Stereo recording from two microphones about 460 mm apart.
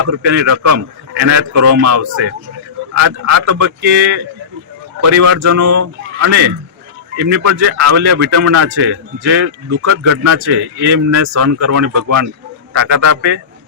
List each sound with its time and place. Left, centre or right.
0.2 s a man's voice: right
4.9 s a man's voice: right